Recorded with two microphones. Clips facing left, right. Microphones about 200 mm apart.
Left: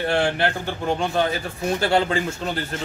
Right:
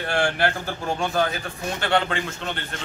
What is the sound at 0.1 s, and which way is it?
A man's voice, 25° left (ahead or behind).